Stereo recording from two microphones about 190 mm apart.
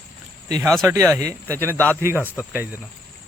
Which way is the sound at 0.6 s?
Centre (ahead or behind).